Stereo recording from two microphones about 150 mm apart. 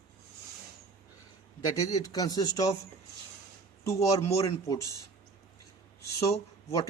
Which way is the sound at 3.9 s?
20° left (ahead or behind).